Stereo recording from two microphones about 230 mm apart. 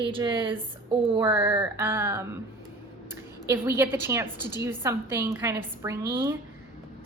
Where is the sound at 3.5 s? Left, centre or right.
Centre.